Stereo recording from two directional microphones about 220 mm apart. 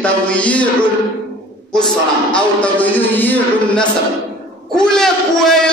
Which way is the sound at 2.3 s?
5° left (ahead or behind).